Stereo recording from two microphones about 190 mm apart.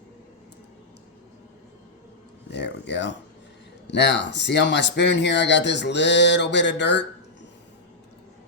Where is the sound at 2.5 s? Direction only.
65° left (ahead or behind).